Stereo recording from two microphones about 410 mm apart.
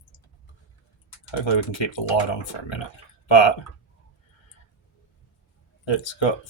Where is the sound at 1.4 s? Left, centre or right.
Left.